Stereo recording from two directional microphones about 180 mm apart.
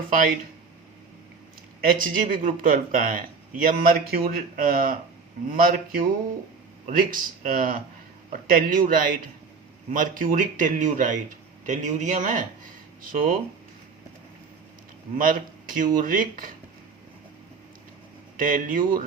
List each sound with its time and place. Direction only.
0.1 s speech: 50° right (ahead or behind)
1.8 s speech: 50° right (ahead or behind)
15.2 s speech: 50° right (ahead or behind)
18.3 s speech: 50° right (ahead or behind)